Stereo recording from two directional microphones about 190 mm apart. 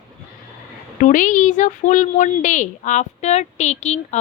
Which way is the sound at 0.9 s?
40° left (ahead or behind).